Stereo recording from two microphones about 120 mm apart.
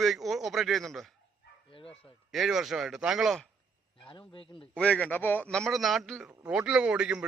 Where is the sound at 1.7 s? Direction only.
50° left (ahead or behind).